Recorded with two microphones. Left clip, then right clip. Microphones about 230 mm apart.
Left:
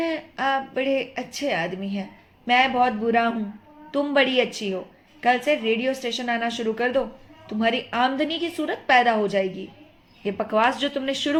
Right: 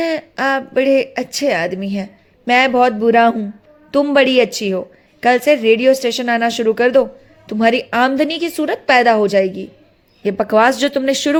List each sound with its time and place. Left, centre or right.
0.0 s speech: right